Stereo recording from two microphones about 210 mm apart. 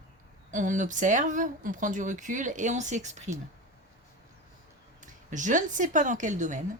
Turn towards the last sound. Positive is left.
turn(degrees=-35)  # may be behind; listen again after turning